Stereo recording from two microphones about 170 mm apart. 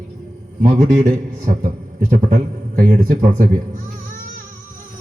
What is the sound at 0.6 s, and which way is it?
A man's voice, 50° right (ahead or behind).